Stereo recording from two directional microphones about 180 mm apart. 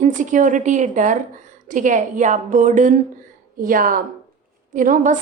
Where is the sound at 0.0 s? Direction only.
45° right (ahead or behind).